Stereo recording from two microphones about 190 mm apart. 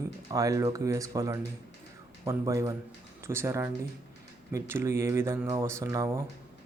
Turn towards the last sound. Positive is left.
turn(degrees=-15)  # may be behind; listen again after turning